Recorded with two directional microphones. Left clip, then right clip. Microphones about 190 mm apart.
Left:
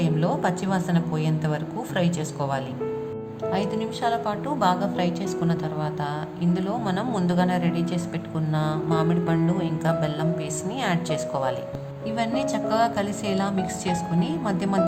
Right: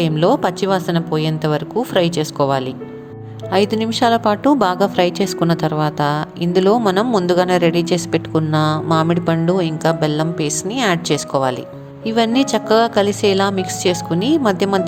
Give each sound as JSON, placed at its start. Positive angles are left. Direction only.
{"t": 0.0, "sound": "a woman's voice", "side_deg": -35}